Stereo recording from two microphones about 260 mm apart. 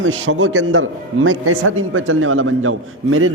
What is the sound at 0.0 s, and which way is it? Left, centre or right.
A man's voice, right.